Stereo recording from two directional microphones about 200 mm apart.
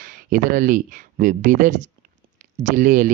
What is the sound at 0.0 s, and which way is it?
Speech, 45° right (ahead or behind).